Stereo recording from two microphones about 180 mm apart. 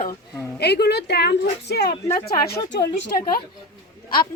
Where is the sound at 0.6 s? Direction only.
65° left (ahead or behind).